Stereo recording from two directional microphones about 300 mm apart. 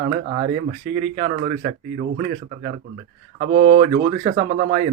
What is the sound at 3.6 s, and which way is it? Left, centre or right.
Speech, right.